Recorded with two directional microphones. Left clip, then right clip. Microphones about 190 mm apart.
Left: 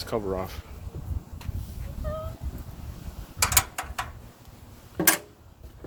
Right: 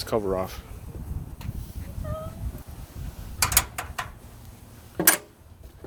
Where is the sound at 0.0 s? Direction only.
55° right (ahead or behind).